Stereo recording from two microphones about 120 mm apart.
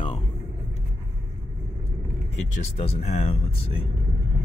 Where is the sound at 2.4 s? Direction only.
80° left; by 3.7 s 60° left (ahead or behind).